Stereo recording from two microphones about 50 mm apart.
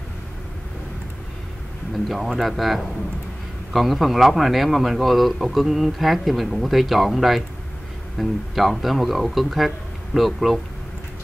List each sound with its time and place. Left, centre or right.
2.0 s a man's voice: centre